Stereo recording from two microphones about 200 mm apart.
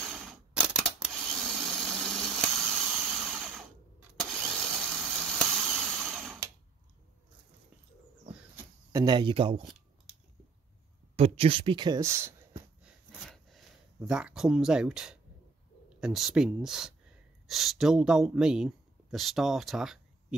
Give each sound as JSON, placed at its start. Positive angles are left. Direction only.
{"t": 0.0, "sound": "camera", "side_deg": 0}
{"t": 4.2, "sound": "engine starting", "side_deg": 0}
{"t": 5.0, "sound": "a sound", "side_deg": 0}
{"t": 8.5, "sound": "speech", "side_deg": -20}
{"t": 11.1, "sound": "speech", "side_deg": -30}
{"t": 12.8, "sound": "a sound", "side_deg": 0}
{"t": 16.0, "sound": "speech", "side_deg": 0}